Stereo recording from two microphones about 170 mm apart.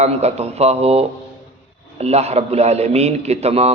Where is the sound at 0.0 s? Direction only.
40° right (ahead or behind).